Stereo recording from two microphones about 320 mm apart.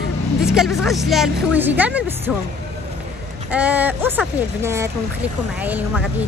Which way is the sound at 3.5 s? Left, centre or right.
Centre.